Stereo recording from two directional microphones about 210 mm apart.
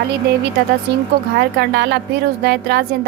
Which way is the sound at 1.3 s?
50° right (ahead or behind).